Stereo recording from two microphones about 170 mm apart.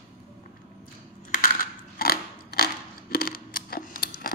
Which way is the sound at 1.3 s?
55° left (ahead or behind).